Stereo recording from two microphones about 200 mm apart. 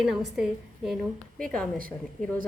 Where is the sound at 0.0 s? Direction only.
Centre (ahead or behind).